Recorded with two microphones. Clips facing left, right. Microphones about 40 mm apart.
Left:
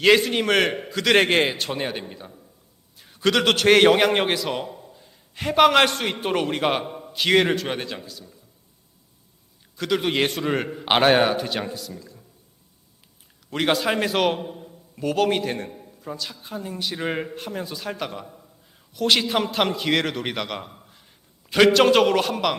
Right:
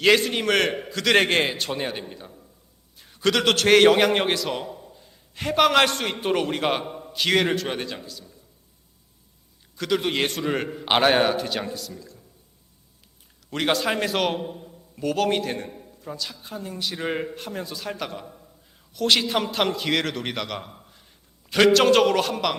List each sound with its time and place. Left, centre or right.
0.0 s a man's voice: centre
9.7 s a man's voice: centre
13.5 s a man's voice: centre